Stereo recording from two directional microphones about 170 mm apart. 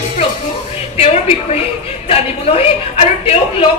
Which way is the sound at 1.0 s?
35° left (ahead or behind).